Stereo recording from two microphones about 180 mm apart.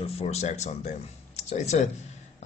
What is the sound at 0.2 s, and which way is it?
Speech, 40° left (ahead or behind).